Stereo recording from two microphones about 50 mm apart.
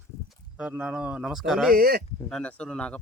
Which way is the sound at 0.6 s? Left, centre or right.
Centre.